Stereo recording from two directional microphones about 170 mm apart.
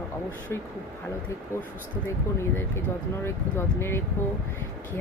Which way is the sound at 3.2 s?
15° left (ahead or behind).